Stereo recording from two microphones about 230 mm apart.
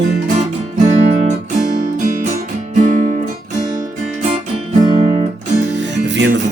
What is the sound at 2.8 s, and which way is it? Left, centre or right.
Guitar, right.